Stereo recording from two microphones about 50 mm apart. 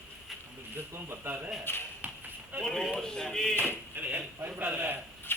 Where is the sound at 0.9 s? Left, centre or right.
Right.